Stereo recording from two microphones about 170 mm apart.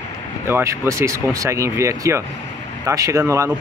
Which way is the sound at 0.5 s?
15° right (ahead or behind).